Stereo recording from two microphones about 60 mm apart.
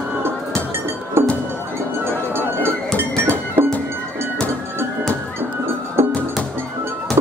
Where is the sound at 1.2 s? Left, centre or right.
Right.